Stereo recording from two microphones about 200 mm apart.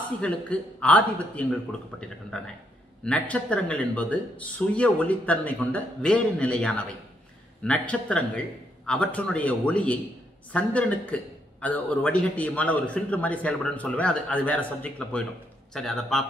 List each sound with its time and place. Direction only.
0.2 s speech: 5° left (ahead or behind)